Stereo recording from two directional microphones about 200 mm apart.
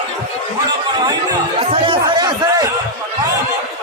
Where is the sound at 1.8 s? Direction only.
20° right (ahead or behind).